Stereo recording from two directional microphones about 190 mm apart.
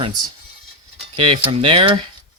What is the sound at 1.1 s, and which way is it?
Speech, 25° right (ahead or behind).